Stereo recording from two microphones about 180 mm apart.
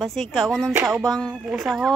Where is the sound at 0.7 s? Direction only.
10° right (ahead or behind).